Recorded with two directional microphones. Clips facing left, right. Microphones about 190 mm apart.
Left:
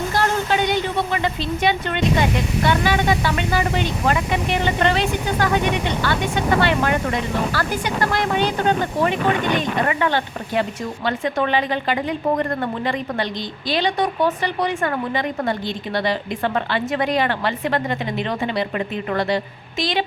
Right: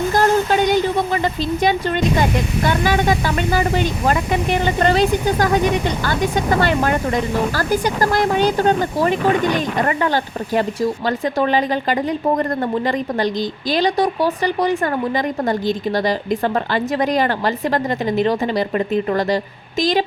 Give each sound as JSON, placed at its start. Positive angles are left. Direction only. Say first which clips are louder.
{"t": 0.1, "sound": "a woman's voice", "louder": "right 5 dB", "side_deg": -40}